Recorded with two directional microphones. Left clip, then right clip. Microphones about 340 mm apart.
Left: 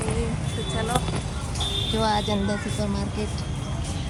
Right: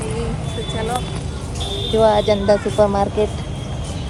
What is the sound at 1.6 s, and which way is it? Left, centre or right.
Speech, centre.